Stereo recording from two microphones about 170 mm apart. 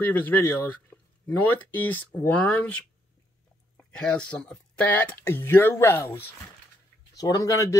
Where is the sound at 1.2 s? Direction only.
10° left (ahead or behind).